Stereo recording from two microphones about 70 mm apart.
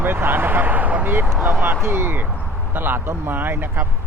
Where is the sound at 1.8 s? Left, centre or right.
Right.